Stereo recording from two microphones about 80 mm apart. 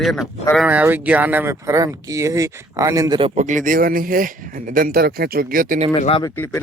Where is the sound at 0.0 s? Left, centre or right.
Centre.